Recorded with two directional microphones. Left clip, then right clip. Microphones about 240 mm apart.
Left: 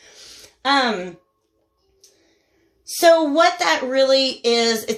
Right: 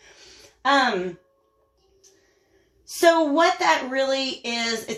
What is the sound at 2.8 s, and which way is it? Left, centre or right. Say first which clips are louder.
Speech: left 4 dB; left.